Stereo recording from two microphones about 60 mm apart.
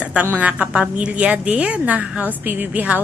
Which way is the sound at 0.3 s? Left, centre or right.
Right.